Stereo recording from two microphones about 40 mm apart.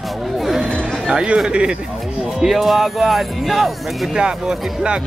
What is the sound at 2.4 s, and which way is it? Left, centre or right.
Speech, centre.